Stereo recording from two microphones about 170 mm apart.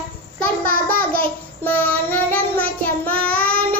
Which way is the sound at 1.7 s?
10° left (ahead or behind).